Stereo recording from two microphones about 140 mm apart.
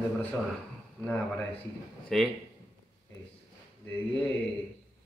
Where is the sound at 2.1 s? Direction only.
Centre (ahead or behind).